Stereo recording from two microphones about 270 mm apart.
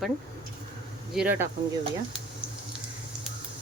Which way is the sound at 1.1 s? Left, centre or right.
Centre.